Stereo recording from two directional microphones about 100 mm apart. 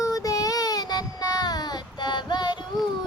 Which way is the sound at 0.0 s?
35° left (ahead or behind).